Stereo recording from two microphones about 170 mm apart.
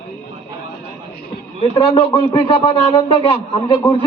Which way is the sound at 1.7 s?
35° left (ahead or behind).